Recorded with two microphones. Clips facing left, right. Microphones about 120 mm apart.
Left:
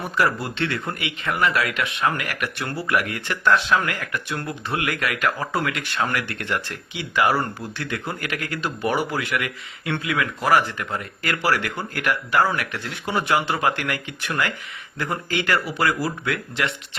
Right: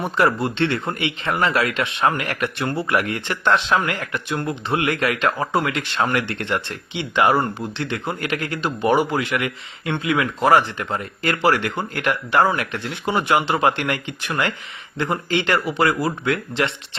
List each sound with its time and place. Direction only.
0.2 s speech: 25° right (ahead or behind)